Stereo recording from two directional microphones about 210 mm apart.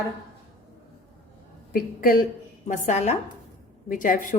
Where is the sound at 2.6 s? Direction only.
35° left (ahead or behind).